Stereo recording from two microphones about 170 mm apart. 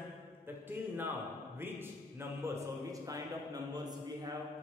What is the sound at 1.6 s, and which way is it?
A man's voice, 15° right (ahead or behind).